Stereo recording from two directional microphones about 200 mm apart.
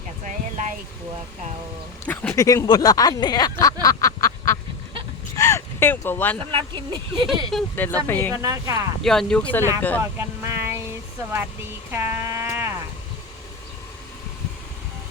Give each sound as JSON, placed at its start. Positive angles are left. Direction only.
{"t": 0.3, "sound": "a sound", "side_deg": -40}
{"t": 2.0, "sound": "speech", "side_deg": 10}
{"t": 5.4, "sound": "a sound", "side_deg": 15}
{"t": 6.4, "sound": "speech", "side_deg": -25}
{"t": 7.5, "sound": "speech", "side_deg": 10}
{"t": 8.3, "sound": "speech", "side_deg": -15}
{"t": 9.0, "sound": "speech", "side_deg": 5}
{"t": 10.0, "sound": "speech", "side_deg": -15}
{"t": 11.9, "sound": "speech", "side_deg": -15}